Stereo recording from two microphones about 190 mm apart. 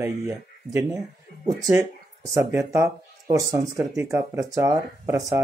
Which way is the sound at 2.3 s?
15° right (ahead or behind).